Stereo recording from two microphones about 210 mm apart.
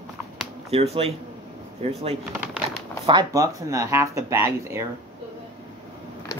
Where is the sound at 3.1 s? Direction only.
20° right (ahead or behind).